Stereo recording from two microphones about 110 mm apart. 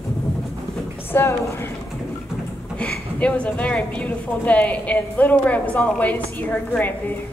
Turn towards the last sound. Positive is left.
turn(degrees=15)  # may be behind; listen again after turning